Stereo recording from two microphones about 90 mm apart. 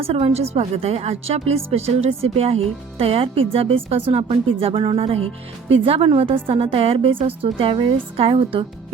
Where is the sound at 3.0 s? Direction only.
90° right.